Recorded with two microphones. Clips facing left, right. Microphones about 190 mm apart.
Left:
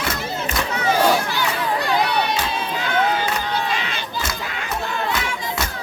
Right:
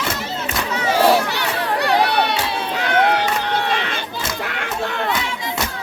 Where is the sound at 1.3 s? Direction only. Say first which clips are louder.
Even; 70° right (ahead or behind).